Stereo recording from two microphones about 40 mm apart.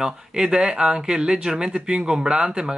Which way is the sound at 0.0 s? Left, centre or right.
Centre.